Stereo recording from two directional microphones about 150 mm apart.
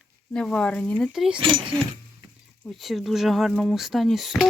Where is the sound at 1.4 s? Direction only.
35° right (ahead or behind).